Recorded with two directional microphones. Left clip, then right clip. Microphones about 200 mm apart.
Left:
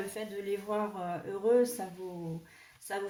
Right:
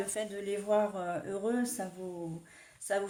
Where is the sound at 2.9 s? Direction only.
45° right (ahead or behind).